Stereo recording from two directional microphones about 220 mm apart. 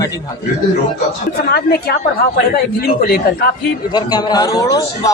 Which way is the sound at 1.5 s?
45° left (ahead or behind).